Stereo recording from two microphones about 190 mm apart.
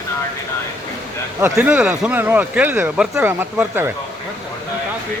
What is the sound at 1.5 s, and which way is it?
Speech, 5° right (ahead or behind).